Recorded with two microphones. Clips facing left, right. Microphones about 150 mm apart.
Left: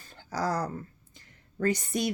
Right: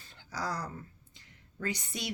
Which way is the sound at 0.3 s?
45° left (ahead or behind).